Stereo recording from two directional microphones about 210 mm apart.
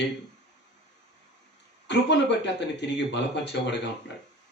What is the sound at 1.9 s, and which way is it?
Speech, 55° left (ahead or behind).